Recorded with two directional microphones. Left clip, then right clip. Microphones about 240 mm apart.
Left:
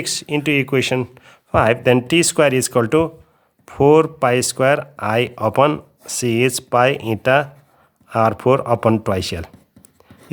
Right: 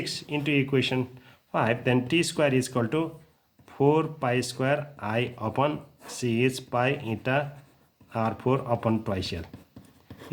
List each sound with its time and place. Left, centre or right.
0.0 s speech: left